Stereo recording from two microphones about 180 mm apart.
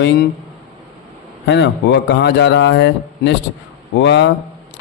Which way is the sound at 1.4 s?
70° left (ahead or behind).